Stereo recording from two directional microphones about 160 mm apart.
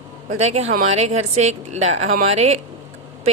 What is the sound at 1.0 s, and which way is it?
A woman's voice, 40° right (ahead or behind).